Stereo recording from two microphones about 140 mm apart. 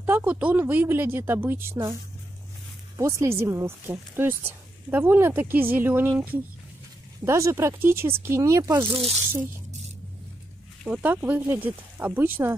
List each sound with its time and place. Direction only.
0.0 s speech: 10° right (ahead or behind)
3.0 s speech: 20° right (ahead or behind)
10.9 s speech: 10° right (ahead or behind)